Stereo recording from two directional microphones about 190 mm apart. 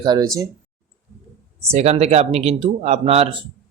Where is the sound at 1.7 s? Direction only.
35° right (ahead or behind).